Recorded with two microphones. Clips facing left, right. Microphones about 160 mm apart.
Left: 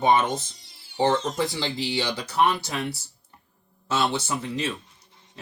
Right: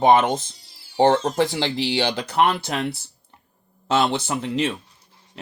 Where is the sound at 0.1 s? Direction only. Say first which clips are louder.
Right 3 dB; 80° right.